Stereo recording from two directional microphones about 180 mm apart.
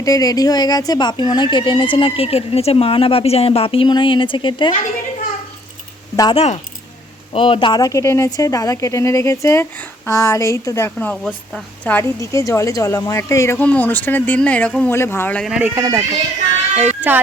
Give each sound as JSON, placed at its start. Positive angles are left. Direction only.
{"t": 0.0, "sound": "speech", "side_deg": 20}
{"t": 6.3, "sound": "speech", "side_deg": 35}
{"t": 15.4, "sound": "speech", "side_deg": -5}
{"t": 15.7, "sound": "speech", "side_deg": -15}